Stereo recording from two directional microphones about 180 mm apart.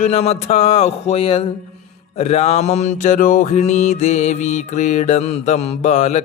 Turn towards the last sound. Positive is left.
turn(degrees=40)  # may be behind; listen again after turning